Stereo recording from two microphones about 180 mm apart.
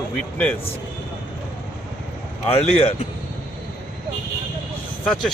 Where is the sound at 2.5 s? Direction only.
35° left (ahead or behind).